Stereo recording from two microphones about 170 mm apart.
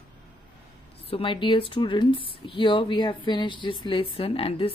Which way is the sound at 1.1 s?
30° left (ahead or behind).